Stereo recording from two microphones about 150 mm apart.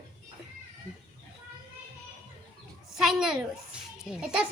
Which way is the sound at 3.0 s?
5° right (ahead or behind).